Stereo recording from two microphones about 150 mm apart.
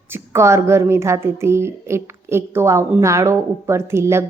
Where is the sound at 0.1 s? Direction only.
20° right (ahead or behind).